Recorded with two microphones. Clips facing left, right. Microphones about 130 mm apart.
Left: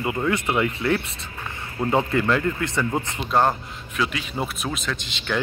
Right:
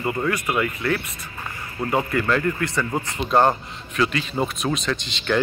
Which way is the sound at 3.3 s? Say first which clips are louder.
Right 2 dB; centre (ahead or behind).